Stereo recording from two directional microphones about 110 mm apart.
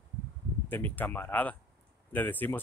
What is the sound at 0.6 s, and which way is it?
A man's voice, 20° left (ahead or behind).